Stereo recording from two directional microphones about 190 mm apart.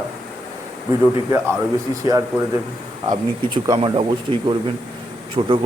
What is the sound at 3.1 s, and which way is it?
A man's voice, 20° right (ahead or behind).